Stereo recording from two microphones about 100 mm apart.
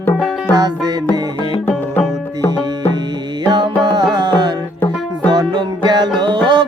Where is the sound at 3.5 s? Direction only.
45° right (ahead or behind).